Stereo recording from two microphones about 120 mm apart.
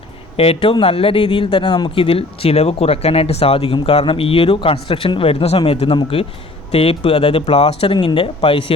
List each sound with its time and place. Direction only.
0.3 s speech: 50° left (ahead or behind)
7.4 s a man's voice: 60° left (ahead or behind)
7.9 s speech: 45° left (ahead or behind)